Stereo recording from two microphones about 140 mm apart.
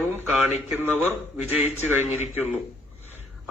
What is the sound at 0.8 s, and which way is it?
A man's voice, 15° right (ahead or behind).